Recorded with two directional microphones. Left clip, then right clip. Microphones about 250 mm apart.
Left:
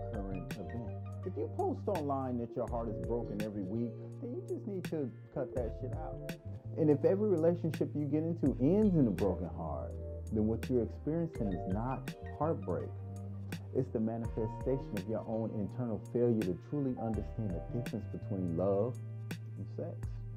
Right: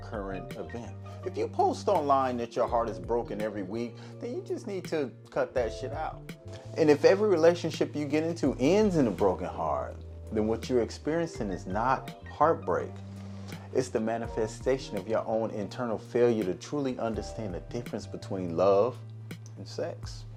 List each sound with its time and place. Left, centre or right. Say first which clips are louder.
1.7 s speech: right 11 dB; centre
8.9 s speech: right 7 dB; centre
11.8 s speech: right 12 dB; centre
15.2 s speech: right 8 dB; centre
17.9 s speech: right 6 dB; centre
18.6 s speech: right 10 dB; centre